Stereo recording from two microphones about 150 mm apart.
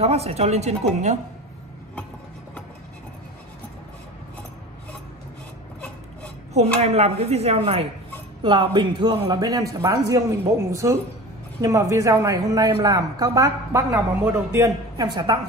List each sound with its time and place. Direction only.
0.0 s a woman's voice: 45° right (ahead or behind)
6.8 s a woman's voice: 45° right (ahead or behind)